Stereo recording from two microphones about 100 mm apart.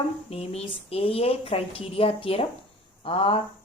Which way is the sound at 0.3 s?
85° left.